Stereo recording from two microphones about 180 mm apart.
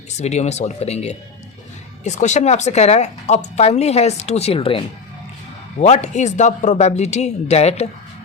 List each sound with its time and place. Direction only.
0.2 s speech: 40° left (ahead or behind)
5.8 s speech: 40° left (ahead or behind)